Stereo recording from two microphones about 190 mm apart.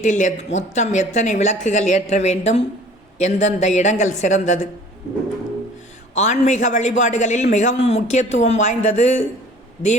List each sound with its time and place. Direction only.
0.0 s a man's voice: 40° left (ahead or behind)
6.1 s a man's voice: 40° left (ahead or behind)